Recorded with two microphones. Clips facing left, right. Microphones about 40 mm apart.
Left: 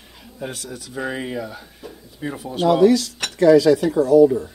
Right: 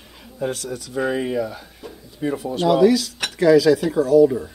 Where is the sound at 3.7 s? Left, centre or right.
Right.